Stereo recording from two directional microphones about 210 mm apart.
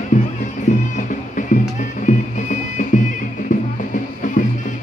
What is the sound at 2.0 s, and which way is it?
Music, 35° left (ahead or behind).